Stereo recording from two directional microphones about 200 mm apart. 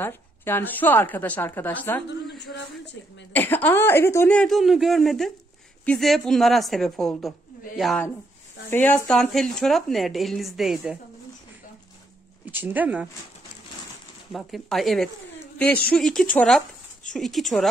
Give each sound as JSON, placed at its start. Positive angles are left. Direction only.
{"t": 0.0, "sound": "a woman's voice", "side_deg": 10}
{"t": 2.0, "sound": "speech", "side_deg": 60}
{"t": 3.3, "sound": "a woman's voice", "side_deg": 10}
{"t": 12.4, "sound": "speech", "side_deg": -10}
{"t": 14.3, "sound": "speech", "side_deg": 0}